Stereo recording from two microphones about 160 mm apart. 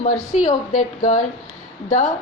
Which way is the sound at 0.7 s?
45° left (ahead or behind).